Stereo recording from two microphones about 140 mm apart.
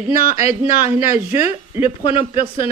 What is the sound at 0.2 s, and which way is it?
Speech, 45° left (ahead or behind).